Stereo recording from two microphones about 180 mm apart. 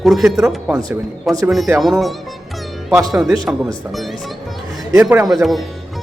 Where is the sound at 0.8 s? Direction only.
20° right (ahead or behind).